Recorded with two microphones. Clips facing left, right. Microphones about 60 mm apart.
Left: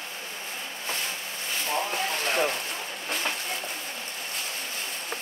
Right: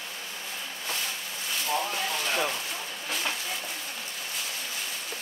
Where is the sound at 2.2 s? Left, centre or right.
Left.